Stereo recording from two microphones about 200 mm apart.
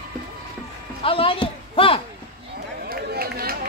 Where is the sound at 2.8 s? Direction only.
50° right (ahead or behind).